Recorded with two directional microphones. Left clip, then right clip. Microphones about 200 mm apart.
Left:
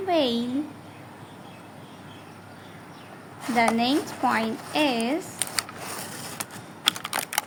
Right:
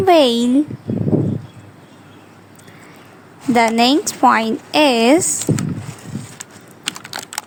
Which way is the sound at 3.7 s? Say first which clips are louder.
Right 10 dB; 55° right (ahead or behind).